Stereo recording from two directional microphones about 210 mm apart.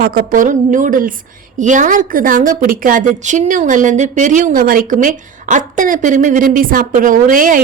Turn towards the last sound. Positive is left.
turn(degrees=-40)  # may be behind; listen again after turning